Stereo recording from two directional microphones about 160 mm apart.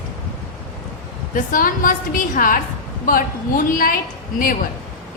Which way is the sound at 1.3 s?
60° left (ahead or behind).